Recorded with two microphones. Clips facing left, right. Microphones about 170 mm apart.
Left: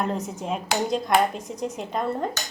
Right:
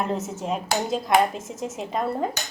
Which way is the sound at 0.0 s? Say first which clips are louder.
Right 1 dB; centre (ahead or behind).